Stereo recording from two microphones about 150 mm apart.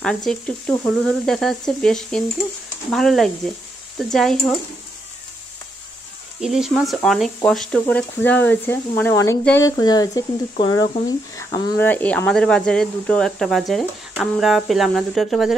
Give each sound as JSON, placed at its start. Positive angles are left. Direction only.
{"t": 0.0, "sound": "speech", "side_deg": 5}
{"t": 6.4, "sound": "speech", "side_deg": 0}